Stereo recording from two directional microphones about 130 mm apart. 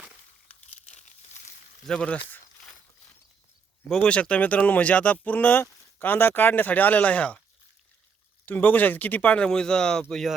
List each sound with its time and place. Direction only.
0.7 s crumpling: 60° left (ahead or behind)
1.9 s speech: 5° left (ahead or behind)
3.8 s speech: 5° left (ahead or behind)
8.4 s speech: 15° left (ahead or behind)